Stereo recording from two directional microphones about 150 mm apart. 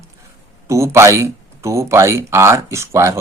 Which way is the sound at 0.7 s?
20° right (ahead or behind).